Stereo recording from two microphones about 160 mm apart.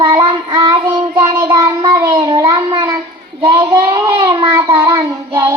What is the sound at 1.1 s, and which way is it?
Child singing, 15° right (ahead or behind).